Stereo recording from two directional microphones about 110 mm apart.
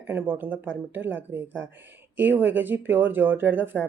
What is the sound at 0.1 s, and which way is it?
Speech, 15° right (ahead or behind).